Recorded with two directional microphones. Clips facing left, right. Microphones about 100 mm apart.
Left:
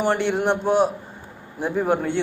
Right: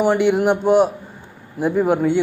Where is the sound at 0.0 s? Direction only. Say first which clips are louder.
Right 5 dB; 5° right (ahead or behind).